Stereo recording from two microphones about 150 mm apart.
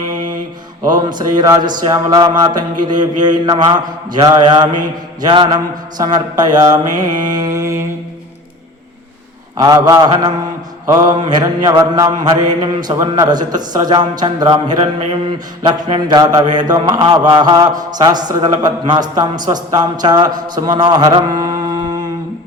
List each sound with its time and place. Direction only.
0.9 s speech: 30° right (ahead or behind)
6.0 s mantra: 25° right (ahead or behind)
9.6 s speech: 25° right (ahead or behind)
21.6 s a sound: 25° right (ahead or behind)